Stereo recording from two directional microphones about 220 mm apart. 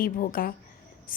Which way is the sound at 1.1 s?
40° left (ahead or behind).